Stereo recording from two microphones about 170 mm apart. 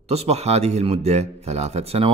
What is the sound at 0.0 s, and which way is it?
Speech, 40° right (ahead or behind).